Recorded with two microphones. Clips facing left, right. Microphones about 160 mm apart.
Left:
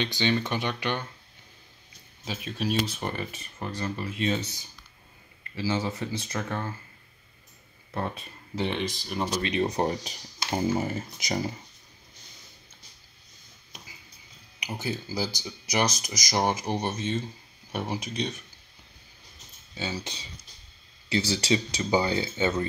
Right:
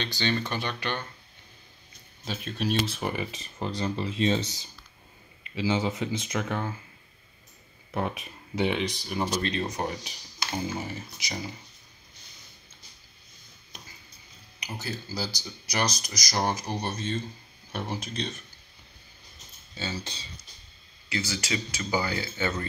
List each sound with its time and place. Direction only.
0.0 s speech: 15° left (ahead or behind)
2.2 s speech: 5° left (ahead or behind)
3.1 s speech: 15° right (ahead or behind)
5.6 s speech: 20° right (ahead or behind)
7.9 s speech: 15° right (ahead or behind)
8.7 s speech: centre (ahead or behind)
9.7 s speech: 35° left (ahead or behind)
10.5 s speech: 50° left (ahead or behind)
14.6 s speech: 15° left (ahead or behind)
19.7 s speech: 15° left (ahead or behind)
21.1 s speech: 30° left (ahead or behind)